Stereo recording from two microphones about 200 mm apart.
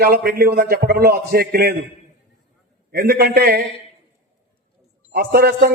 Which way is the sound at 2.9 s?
50° right (ahead or behind).